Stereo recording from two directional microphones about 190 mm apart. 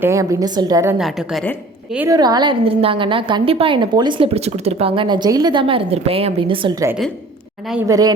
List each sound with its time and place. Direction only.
0.0 s a woman's voice: 15° right (ahead or behind)
0.9 s a woman's voice: centre (ahead or behind)
2.0 s a woman's voice: 20° right (ahead or behind)